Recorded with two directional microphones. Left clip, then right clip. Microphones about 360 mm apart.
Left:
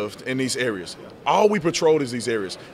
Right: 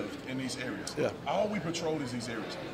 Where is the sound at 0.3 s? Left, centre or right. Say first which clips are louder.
Left 16 dB; left.